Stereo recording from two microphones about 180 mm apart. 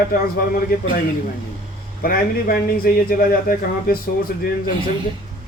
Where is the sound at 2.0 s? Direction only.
55° left (ahead or behind).